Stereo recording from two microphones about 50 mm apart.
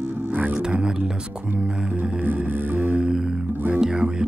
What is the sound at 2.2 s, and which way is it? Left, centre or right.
Music, right.